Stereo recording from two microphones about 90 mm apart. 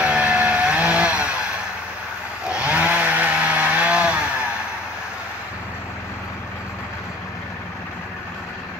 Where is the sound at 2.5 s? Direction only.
15° right (ahead or behind).